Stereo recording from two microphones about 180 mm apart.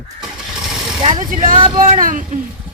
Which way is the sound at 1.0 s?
25° right (ahead or behind).